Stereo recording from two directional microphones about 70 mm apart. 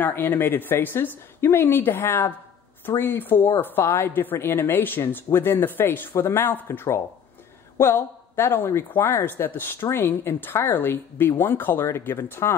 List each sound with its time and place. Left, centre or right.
0.0 s speech: left